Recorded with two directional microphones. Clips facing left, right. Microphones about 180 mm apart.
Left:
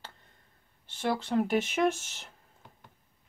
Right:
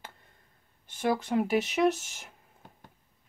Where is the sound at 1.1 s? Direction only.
10° right (ahead or behind).